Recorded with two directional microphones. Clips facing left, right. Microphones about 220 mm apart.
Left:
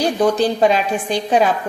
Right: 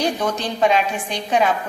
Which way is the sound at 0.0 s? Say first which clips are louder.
Left 6 dB; 35° left (ahead or behind).